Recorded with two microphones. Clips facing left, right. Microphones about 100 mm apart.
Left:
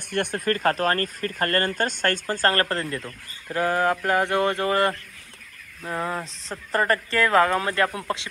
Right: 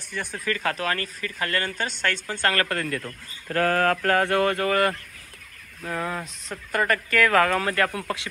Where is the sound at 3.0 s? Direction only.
15° left (ahead or behind).